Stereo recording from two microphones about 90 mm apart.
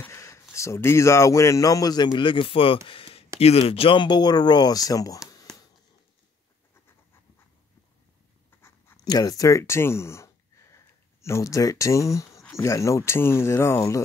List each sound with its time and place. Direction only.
0.1 s speech: 35° left (ahead or behind)
2.1 s speech: 65° left (ahead or behind); by 2.8 s 90° left
2.9 s a sound: 90° left
3.3 s speech: 90° left; by 5.2 s 40° left (ahead or behind)
8.9 s speech: 45° left (ahead or behind)